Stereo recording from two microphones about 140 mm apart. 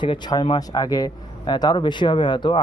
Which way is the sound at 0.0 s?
30° left (ahead or behind).